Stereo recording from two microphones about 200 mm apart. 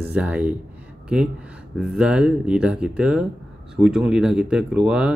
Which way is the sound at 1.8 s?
5° right (ahead or behind).